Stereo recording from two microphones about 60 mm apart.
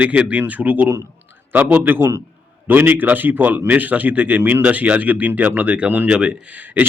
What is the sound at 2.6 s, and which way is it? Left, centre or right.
A man's voice, right.